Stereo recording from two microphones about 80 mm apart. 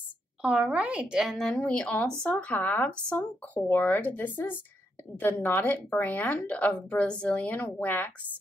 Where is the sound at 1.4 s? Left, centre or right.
Centre.